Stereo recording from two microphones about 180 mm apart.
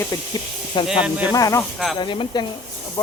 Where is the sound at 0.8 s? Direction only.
25° left (ahead or behind).